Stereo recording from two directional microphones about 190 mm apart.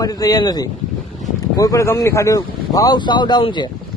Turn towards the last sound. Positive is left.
turn(degrees=25)  # may be behind; listen again after turning